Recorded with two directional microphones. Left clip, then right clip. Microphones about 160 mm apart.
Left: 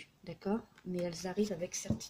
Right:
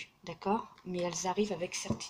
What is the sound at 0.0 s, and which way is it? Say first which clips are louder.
Speech: right 5 dB; 45° left (ahead or behind).